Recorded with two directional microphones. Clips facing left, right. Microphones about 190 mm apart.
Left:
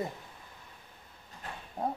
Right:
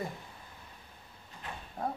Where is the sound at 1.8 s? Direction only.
20° left (ahead or behind).